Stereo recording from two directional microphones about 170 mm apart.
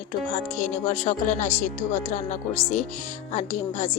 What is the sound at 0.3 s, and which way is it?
A woman's voice, 50° left (ahead or behind).